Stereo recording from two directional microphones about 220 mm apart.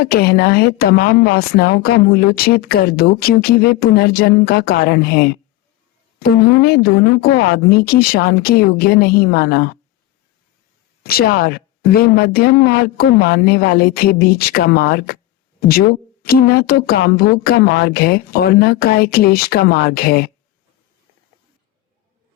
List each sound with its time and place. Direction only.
0.0 s a woman's voice: 45° left (ahead or behind)
11.0 s a woman's voice: 45° left (ahead or behind)